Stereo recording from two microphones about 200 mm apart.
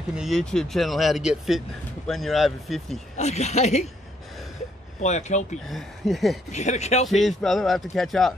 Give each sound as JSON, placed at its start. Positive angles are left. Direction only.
{"t": 0.1, "sound": "speech", "side_deg": 0}
{"t": 3.2, "sound": "speech", "side_deg": 35}
{"t": 5.0, "sound": "speech", "side_deg": 35}
{"t": 5.7, "sound": "speech", "side_deg": 0}
{"t": 6.5, "sound": "speech", "side_deg": 35}
{"t": 7.1, "sound": "speech", "side_deg": 0}